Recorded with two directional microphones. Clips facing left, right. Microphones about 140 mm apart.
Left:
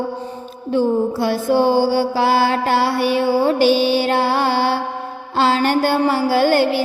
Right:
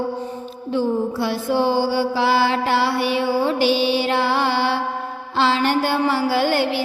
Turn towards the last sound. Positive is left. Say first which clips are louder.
# left 4 dB
turn(degrees=45)  # may be behind; listen again after turning